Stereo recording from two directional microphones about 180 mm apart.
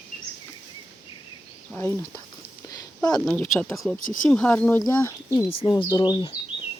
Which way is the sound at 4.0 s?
45° left (ahead or behind).